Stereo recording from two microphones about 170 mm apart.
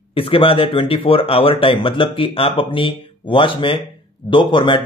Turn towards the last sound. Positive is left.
turn(degrees=30)  # may be behind; listen again after turning